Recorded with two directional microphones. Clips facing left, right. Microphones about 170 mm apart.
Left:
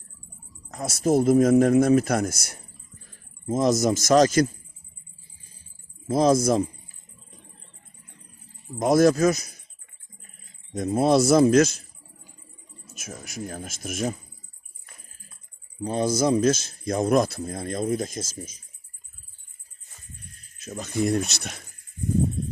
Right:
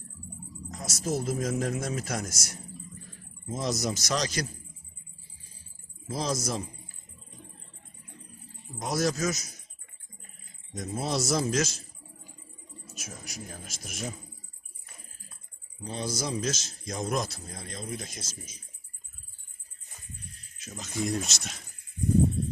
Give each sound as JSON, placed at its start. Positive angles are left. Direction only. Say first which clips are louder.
{"t": 0.7, "sound": "a man's voice", "louder": "left 10 dB", "side_deg": 55}
{"t": 6.1, "sound": "speech", "louder": "left 12 dB", "side_deg": 55}
{"t": 8.8, "sound": "a man's voice", "louder": "left 11 dB", "side_deg": 55}
{"t": 10.8, "sound": "a man's voice", "louder": "left 11 dB", "side_deg": 55}
{"t": 13.0, "sound": "speech", "louder": "left 8 dB", "side_deg": 55}
{"t": 15.8, "sound": "speech", "louder": "left 11 dB", "side_deg": 55}
{"t": 20.7, "sound": "a man's voice", "louder": "left 7 dB", "side_deg": 55}